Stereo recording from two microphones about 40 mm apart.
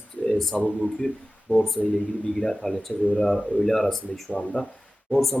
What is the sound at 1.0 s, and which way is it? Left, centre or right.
Speech, left.